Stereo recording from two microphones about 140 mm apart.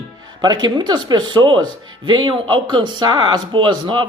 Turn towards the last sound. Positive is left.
turn(degrees=-35)  # may be behind; listen again after turning